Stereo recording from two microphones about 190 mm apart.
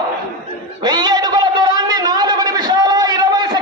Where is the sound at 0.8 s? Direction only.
20° right (ahead or behind).